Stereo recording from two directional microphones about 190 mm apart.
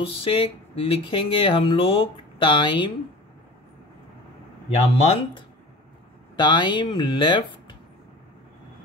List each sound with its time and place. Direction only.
0.0 s speech: 30° left (ahead or behind)
4.6 s speech: 35° left (ahead or behind)